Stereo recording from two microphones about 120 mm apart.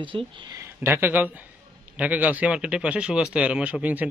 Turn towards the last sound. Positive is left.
turn(degrees=-15)  # may be behind; listen again after turning